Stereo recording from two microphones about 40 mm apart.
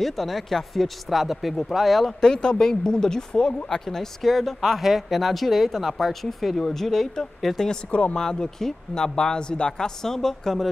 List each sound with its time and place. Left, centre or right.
0.0 s speech: centre
2.2 s speech: centre
7.9 s speech: left
8.2 s speech: centre